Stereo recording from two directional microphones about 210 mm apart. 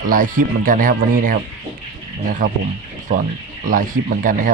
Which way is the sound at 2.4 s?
40° right (ahead or behind).